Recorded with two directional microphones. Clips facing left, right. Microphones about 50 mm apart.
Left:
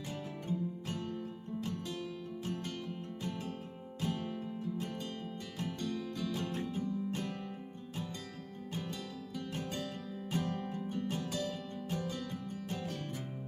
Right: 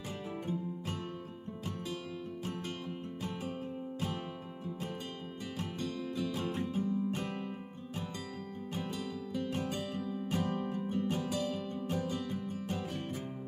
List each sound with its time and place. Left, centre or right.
0.4 s music: right
2.4 s music: right
4.0 s music: right
9.3 s music: right